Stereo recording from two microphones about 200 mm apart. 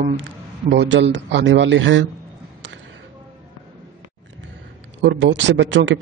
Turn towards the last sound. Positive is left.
turn(degrees=-65)  # may be behind; listen again after turning